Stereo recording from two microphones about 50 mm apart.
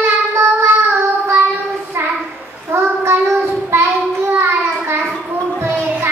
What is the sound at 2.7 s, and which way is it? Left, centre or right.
Child singing, right.